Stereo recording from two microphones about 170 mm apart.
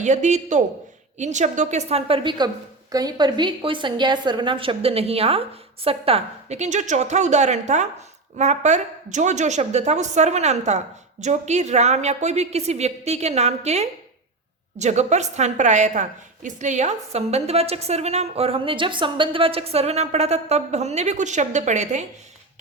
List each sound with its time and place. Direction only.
0.0 s a woman's voice: 45° right (ahead or behind)